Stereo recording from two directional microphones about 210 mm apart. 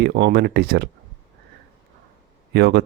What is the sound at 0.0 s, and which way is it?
Speech, 50° right (ahead or behind).